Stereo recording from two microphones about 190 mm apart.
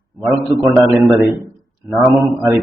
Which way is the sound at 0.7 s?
15° right (ahead or behind).